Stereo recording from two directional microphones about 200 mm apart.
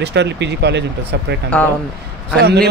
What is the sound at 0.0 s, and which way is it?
Speech, 60° right (ahead or behind).